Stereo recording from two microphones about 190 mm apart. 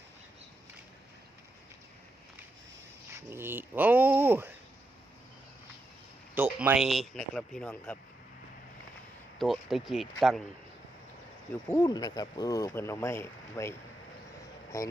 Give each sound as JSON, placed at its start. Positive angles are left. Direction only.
{"t": 3.2, "sound": "speech", "side_deg": -10}
{"t": 6.3, "sound": "speech", "side_deg": -10}
{"t": 9.4, "sound": "speech", "side_deg": 0}
{"t": 11.7, "sound": "speech", "side_deg": 20}
{"t": 14.7, "sound": "speech", "side_deg": 15}